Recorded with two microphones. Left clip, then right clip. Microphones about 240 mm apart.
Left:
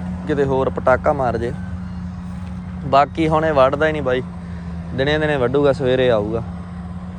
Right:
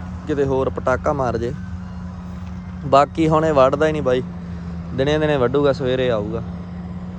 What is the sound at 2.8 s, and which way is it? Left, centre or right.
Speech, centre.